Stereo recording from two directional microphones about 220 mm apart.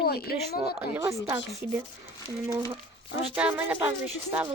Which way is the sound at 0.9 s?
15° right (ahead or behind).